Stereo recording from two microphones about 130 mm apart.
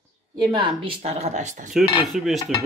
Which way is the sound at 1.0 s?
60° right (ahead or behind).